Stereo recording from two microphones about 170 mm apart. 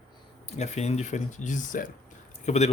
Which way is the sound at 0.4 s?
40° left (ahead or behind).